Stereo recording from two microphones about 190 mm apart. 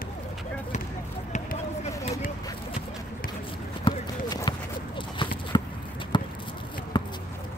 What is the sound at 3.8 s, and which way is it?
Clip-clop, 25° left (ahead or behind).